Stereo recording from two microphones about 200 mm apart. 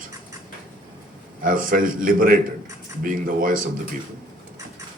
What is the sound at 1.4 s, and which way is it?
Speech, 45° right (ahead or behind).